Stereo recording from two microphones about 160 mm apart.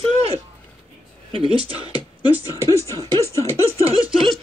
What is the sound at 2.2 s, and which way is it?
Speech, 25° left (ahead or behind).